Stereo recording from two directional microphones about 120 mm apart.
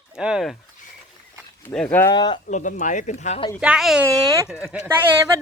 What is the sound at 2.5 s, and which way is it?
Speech, 90° left.